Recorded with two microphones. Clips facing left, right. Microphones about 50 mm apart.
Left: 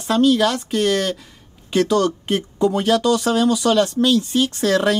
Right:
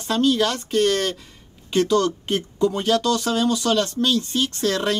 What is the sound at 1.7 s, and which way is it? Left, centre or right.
Speech, left.